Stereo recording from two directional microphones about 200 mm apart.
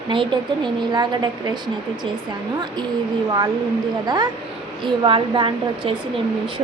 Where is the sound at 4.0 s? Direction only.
20° right (ahead or behind).